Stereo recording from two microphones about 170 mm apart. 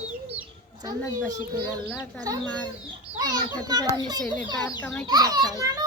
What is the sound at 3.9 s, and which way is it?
Speech, 25° right (ahead or behind).